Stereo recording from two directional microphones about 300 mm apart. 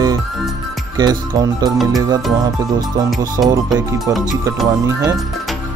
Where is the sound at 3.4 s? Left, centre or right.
Centre.